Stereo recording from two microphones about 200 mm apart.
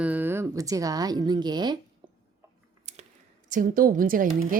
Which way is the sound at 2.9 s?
35° right (ahead or behind).